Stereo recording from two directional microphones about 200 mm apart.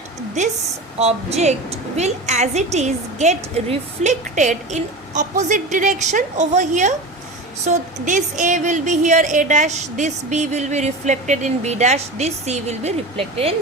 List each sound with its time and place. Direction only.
0.9 s a woman's voice: 30° right (ahead or behind)